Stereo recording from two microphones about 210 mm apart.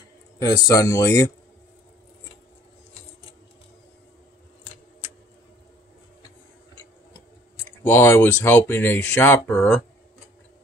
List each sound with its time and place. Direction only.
0.4 s speech: 15° left (ahead or behind)
7.5 s speech: 10° left (ahead or behind)